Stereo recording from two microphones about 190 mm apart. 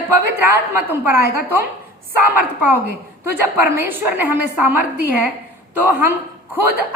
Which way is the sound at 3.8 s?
10° right (ahead or behind).